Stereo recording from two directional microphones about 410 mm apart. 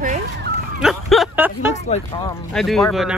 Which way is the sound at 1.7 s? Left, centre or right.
Centre.